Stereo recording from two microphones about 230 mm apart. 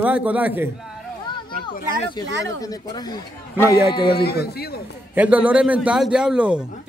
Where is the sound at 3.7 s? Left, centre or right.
Centre.